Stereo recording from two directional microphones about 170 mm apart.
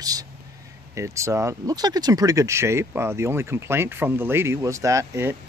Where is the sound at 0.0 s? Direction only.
20° right (ahead or behind).